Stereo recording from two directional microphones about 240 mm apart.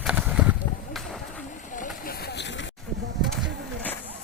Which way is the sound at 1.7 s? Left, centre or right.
Left.